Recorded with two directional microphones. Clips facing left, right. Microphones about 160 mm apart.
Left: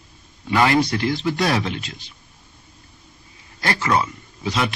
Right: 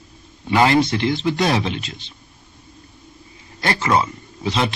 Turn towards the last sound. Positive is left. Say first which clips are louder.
# right 2 dB
turn(degrees=-25)  # may be behind; listen again after turning